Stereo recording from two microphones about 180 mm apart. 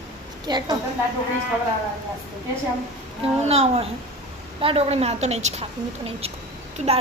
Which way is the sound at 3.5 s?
35° right (ahead or behind).